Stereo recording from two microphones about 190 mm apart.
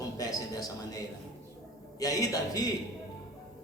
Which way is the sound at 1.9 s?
20° left (ahead or behind).